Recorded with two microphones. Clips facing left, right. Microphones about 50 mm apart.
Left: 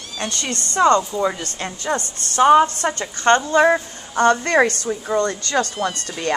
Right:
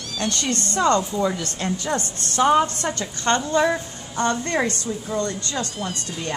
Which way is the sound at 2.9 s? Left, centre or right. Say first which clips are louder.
Left 6 dB; left.